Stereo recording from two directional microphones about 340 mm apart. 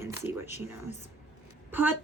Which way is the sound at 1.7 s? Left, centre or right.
Centre.